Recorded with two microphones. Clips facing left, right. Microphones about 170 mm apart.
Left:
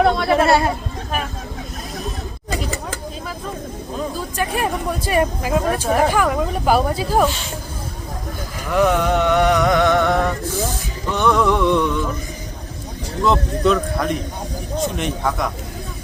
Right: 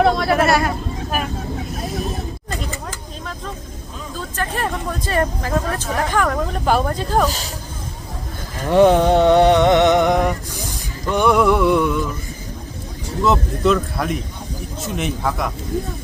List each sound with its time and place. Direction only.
0.0 s speech: centre (ahead or behind)
0.3 s speech: 25° left (ahead or behind)
4.2 s speech: 10° left (ahead or behind)
8.6 s music: 30° right (ahead or behind); by 11.9 s 5° right (ahead or behind)
13.2 s speech: centre (ahead or behind)